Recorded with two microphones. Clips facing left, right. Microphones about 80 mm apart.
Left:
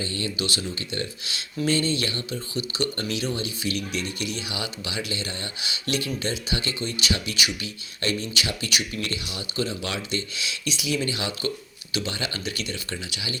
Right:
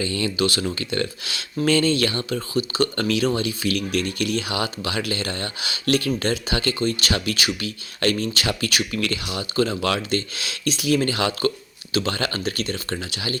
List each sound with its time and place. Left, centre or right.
0.0 s speech: right
0.4 s speech: right
2.6 s speech: right
3.0 s speech: right
8.4 s speech: right
9.6 s speech: right